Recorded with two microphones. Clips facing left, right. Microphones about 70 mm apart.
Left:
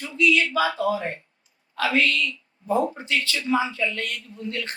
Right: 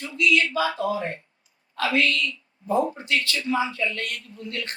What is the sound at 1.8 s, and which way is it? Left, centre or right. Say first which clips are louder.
Speech: left 1 dB; left.